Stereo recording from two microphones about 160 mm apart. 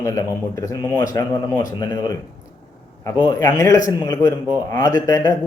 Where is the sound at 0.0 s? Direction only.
20° left (ahead or behind).